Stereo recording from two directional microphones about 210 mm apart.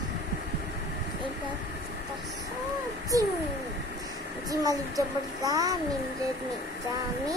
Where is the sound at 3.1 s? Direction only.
15° right (ahead or behind).